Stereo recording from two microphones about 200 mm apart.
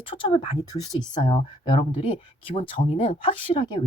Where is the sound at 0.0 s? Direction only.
25° left (ahead or behind).